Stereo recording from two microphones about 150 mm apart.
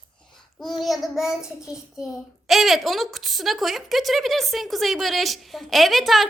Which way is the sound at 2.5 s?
Centre (ahead or behind).